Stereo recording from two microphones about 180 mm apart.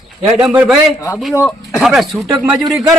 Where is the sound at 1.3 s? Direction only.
15° left (ahead or behind).